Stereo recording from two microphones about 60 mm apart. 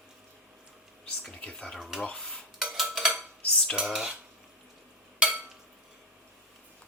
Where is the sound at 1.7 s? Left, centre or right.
Centre.